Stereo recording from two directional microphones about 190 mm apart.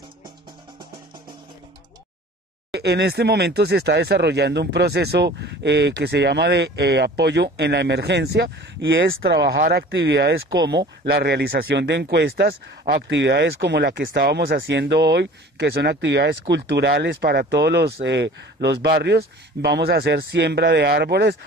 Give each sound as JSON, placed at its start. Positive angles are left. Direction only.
{"t": 2.7, "sound": "speech", "side_deg": -60}